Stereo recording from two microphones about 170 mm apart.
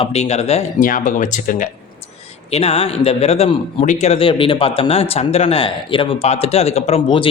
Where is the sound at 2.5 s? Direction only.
35° left (ahead or behind).